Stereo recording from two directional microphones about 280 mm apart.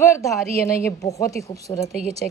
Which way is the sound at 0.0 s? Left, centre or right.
Centre.